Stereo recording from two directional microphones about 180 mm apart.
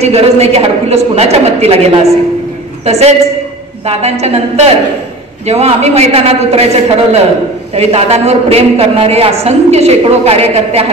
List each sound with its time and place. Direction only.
0.0 s a woman's voice: 35° right (ahead or behind)
2.8 s a woman's voice: 35° right (ahead or behind)